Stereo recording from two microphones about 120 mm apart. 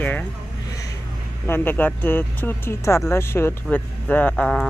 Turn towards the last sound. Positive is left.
turn(degrees=5)  # may be behind; listen again after turning